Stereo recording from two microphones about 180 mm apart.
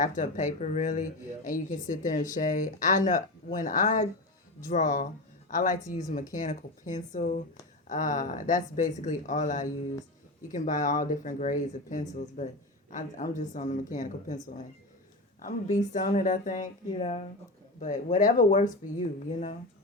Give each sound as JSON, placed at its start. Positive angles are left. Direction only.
{"t": 0.0, "sound": "speech", "side_deg": 45}
{"t": 15.9, "sound": "speech", "side_deg": 45}